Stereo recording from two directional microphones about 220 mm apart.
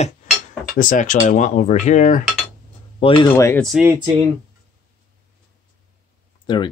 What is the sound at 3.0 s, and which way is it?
Speech, 20° left (ahead or behind).